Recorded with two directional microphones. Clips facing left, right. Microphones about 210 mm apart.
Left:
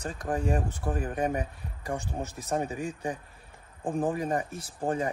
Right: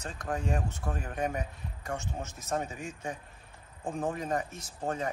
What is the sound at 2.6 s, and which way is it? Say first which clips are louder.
Speech: left 6 dB; 35° left (ahead or behind).